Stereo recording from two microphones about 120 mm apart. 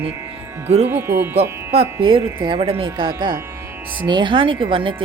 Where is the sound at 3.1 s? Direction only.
35° right (ahead or behind).